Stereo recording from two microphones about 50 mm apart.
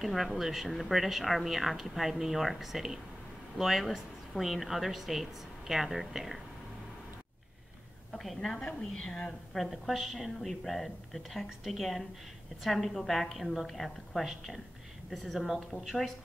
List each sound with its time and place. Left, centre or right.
0.0 s speech: centre
8.2 s speech: centre
8.6 s a woman's voice: centre
9.6 s speech: centre